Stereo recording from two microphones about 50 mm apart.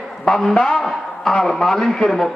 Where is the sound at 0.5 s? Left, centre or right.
Centre.